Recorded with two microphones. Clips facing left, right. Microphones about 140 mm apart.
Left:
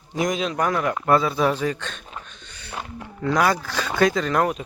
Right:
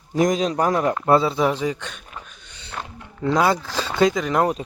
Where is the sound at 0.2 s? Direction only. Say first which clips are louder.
Right 4 dB; 40° right (ahead or behind); by 2.0 s 15° right (ahead or behind).